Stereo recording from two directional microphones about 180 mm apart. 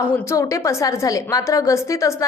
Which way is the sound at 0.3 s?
15° left (ahead or behind).